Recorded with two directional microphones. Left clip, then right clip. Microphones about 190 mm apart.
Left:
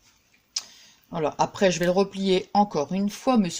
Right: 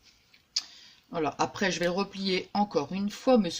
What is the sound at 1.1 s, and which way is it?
Speech, 45° left (ahead or behind).